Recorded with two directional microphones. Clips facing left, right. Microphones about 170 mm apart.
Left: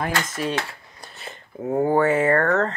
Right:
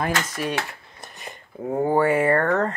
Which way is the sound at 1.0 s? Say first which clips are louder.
Even; 15° right (ahead or behind).